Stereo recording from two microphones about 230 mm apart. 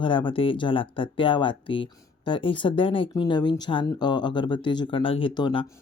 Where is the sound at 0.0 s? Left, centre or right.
Left.